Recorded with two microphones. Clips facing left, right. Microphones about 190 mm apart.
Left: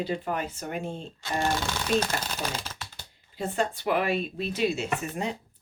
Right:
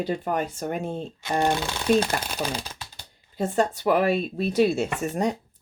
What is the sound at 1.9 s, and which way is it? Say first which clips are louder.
Speech: right 4 dB; 10° right (ahead or behind).